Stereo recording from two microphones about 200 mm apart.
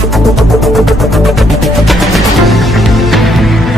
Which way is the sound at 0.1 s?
Centre (ahead or behind).